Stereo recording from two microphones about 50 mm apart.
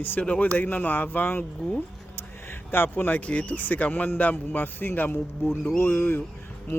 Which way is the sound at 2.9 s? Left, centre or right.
Left.